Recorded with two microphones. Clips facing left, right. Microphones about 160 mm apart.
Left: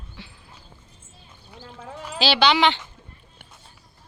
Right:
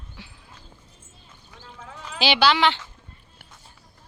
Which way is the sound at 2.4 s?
Centre (ahead or behind).